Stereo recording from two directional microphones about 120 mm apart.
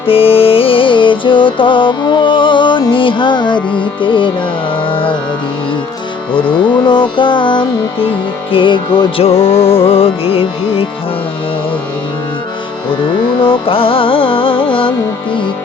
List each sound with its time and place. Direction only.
0.0 s music: 50° left (ahead or behind)
6.3 s music: 40° left (ahead or behind)
13.4 s music: 45° left (ahead or behind)